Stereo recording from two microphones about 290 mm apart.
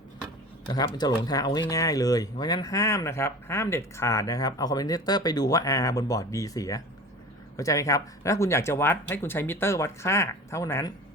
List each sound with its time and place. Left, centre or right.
0.7 s speech: centre